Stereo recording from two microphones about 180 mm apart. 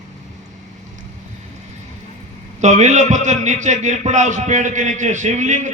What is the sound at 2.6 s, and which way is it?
A man's voice, 40° right (ahead or behind).